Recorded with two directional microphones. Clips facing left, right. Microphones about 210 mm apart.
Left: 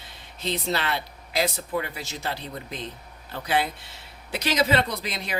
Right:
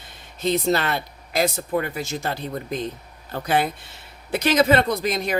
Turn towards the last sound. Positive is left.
turn(degrees=-45)  # may be behind; listen again after turning